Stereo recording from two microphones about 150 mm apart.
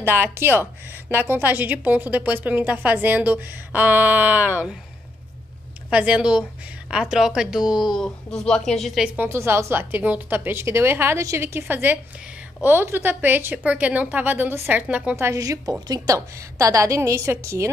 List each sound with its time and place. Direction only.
0.0 s speech: 15° right (ahead or behind)
5.9 s a woman's voice: 10° right (ahead or behind)